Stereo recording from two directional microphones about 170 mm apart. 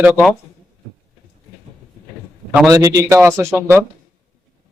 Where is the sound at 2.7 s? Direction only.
20° right (ahead or behind).